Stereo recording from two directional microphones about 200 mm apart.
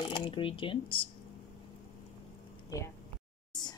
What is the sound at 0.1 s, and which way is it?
Speech, 25° left (ahead or behind).